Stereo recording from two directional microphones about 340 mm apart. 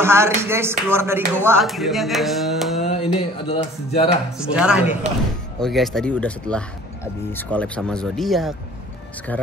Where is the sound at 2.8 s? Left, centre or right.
Centre.